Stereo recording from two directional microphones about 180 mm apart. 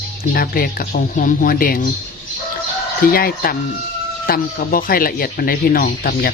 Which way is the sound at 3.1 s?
55° left (ahead or behind).